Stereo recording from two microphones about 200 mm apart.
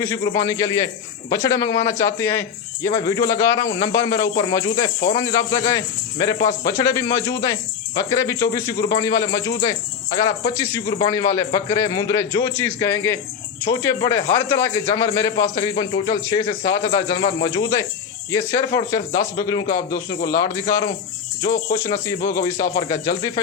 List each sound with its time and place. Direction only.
0.0 s speech: 15° left (ahead or behind)